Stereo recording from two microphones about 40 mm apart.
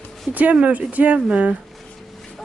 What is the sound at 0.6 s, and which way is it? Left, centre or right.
Speech, right.